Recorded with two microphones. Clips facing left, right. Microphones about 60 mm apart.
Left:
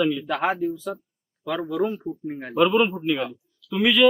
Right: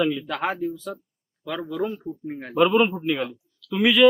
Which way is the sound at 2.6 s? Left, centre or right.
Centre.